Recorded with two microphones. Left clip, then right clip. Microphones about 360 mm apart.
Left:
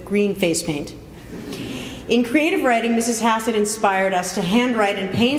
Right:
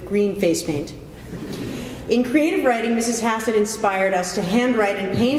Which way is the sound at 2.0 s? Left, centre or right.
Left.